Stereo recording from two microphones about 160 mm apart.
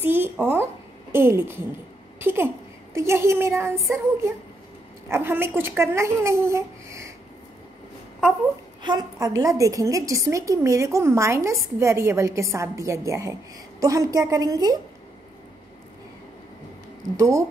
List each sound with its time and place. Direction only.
0.0 s a child's voice: 15° right (ahead or behind)
8.8 s a woman's voice: 25° right (ahead or behind)
17.2 s a woman's voice: 20° right (ahead or behind)